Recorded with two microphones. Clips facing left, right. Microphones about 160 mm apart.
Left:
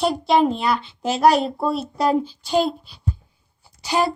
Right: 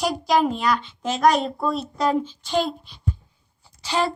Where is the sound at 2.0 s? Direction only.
35° left (ahead or behind).